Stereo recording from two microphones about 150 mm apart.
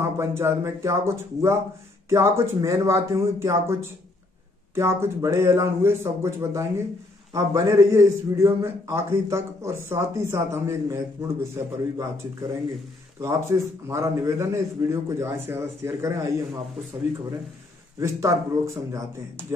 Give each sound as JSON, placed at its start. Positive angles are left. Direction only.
{"t": 0.0, "sound": "a man's voice", "side_deg": -15}
{"t": 4.7, "sound": "a man's voice", "side_deg": -15}
{"t": 18.0, "sound": "a man's voice", "side_deg": -20}